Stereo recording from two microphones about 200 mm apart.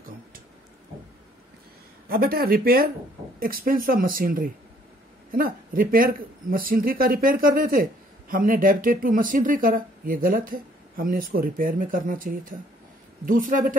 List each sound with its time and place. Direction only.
2.0 s speech: 50° right (ahead or behind)